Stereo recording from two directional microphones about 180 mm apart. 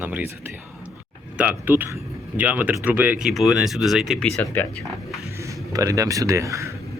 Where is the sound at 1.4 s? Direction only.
10° right (ahead or behind); by 4.7 s 10° left (ahead or behind).